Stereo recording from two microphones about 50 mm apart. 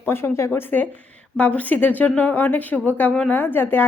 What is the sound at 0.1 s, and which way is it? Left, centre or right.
Speech, left.